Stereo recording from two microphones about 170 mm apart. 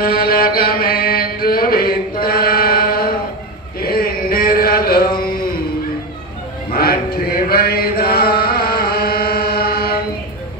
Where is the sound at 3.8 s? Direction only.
60° left (ahead or behind).